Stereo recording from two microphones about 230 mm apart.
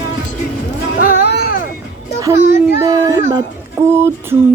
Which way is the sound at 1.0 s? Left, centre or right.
Left.